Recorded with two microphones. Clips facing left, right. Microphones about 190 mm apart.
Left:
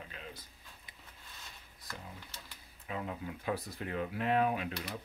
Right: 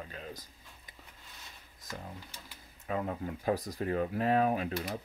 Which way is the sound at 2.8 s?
45° right (ahead or behind).